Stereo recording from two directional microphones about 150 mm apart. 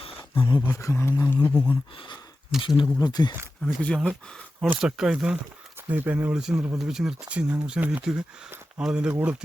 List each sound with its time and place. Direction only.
0.0 s speech: 35° left (ahead or behind); by 1.7 s 15° left (ahead or behind)
2.6 s speech: 35° left (ahead or behind)
3.6 s speech: 5° left (ahead or behind)
4.7 s speech: 5° right (ahead or behind)